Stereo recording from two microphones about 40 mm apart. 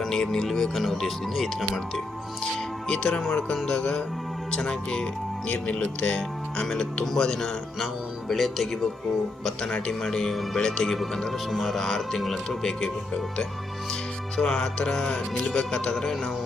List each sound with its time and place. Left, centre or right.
0.1 s speech: centre
0.7 s speech: centre
2.4 s speech: centre
3.1 s speech: centre
3.7 s speech: centre
6.7 s speech: centre
8.3 s speech: centre
9.6 s speech: left
10.0 s speech: centre
14.3 s speech: centre